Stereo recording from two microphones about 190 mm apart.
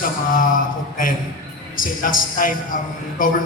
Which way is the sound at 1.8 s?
45° left (ahead or behind).